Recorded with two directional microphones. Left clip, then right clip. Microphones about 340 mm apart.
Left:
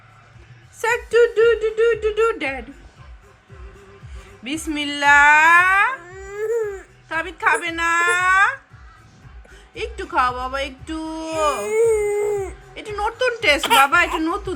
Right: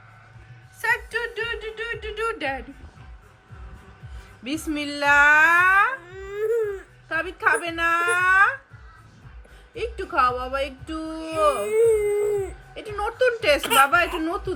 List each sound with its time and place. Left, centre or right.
0.9 s a sound: centre
2.2 s speech: centre
4.4 s speech: centre
9.7 s speech: centre